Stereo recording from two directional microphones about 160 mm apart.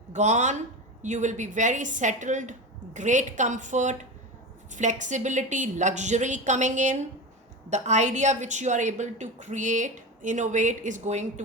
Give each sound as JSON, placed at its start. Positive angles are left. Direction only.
{"t": 0.1, "sound": "a woman's voice", "side_deg": -50}